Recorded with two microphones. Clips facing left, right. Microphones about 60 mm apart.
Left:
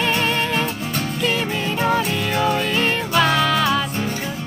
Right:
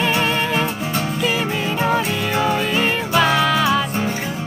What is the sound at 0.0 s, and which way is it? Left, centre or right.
Music, centre.